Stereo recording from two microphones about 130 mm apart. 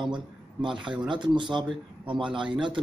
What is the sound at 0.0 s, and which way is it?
A man's voice, 40° right (ahead or behind).